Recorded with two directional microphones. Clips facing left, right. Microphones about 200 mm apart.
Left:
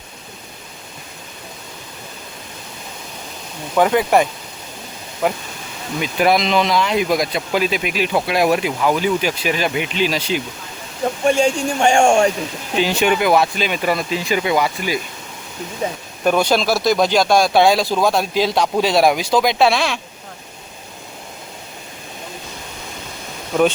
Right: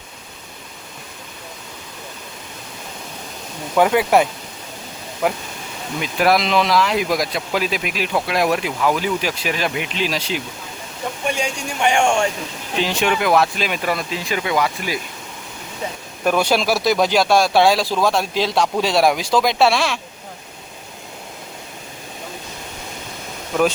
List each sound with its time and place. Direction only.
3.8 s speech: 10° right (ahead or behind)
6.0 s speech: centre (ahead or behind)
11.3 s speech: 50° left (ahead or behind)
12.7 s speech: 5° left (ahead or behind)
16.2 s speech: 5° right (ahead or behind)